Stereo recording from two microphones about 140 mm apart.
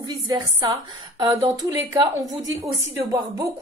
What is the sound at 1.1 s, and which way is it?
A woman's voice, 30° right (ahead or behind).